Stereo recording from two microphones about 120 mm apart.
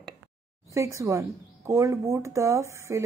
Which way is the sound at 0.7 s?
25° right (ahead or behind).